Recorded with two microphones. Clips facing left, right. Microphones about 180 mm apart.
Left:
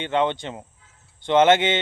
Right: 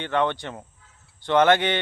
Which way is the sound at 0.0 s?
20° left (ahead or behind).